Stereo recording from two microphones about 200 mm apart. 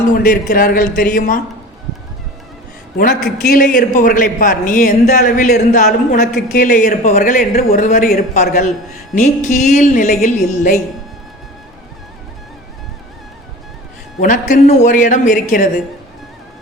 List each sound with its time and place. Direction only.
0.1 s a man's voice: 45° left (ahead or behind)
3.0 s a man's voice: 50° left (ahead or behind)
14.2 s speech: 40° left (ahead or behind)